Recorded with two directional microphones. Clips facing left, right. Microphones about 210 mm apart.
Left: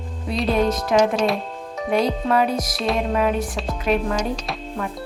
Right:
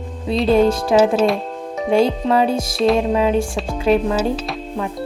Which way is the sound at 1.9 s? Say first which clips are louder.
Right 4 dB; 30° right (ahead or behind).